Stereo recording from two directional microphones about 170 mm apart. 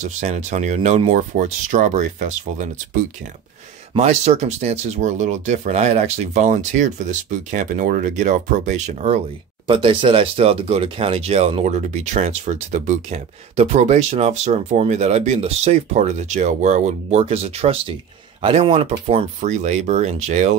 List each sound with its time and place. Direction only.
0.0 s speech: 40° right (ahead or behind)
3.9 s speech: 40° right (ahead or behind)
9.7 s speech: 30° right (ahead or behind)